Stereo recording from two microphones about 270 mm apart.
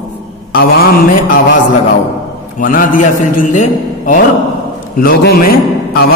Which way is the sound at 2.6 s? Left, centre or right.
Left.